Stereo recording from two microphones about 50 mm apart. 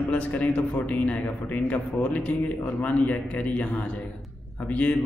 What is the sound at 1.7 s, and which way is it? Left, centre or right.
A man's voice, left.